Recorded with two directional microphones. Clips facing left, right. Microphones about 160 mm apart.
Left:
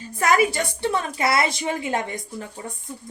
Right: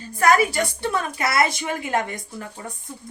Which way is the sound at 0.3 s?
25° left (ahead or behind).